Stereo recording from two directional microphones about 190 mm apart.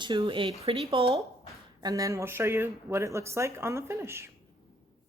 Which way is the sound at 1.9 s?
15° right (ahead or behind).